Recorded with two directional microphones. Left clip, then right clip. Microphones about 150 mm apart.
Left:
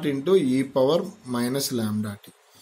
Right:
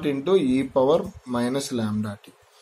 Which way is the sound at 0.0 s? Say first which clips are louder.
Even; 35° left (ahead or behind).